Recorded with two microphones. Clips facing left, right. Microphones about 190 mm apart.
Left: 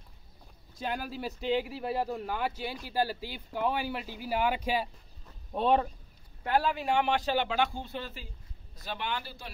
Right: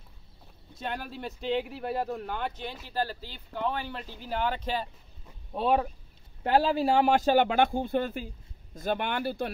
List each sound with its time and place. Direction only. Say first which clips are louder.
0.7 s speech: left 1 dB; 5° left (ahead or behind)
5.5 s speech: even; 5° right (ahead or behind)
6.4 s a man's voice: right 5 dB; 30° right (ahead or behind); by 9.5 s 55° right (ahead or behind)